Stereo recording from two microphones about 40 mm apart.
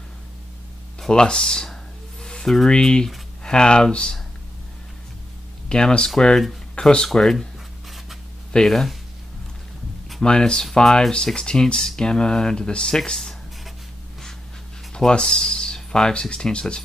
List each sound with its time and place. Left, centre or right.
1.1 s speech: centre
2.2 s a sound: centre
2.7 s speech: centre
5.7 s speech: centre
6.7 s a sound: centre
7.2 s speech: centre
8.6 s speech: centre
10.2 s speech: left
15.0 s speech: centre